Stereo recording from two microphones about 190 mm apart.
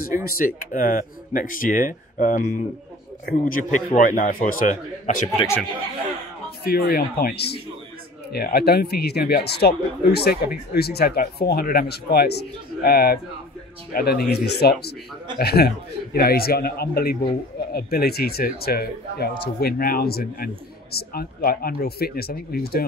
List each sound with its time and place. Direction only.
0.0 s a man's voice: 50° left (ahead or behind)
6.6 s a man's voice: 55° left (ahead or behind)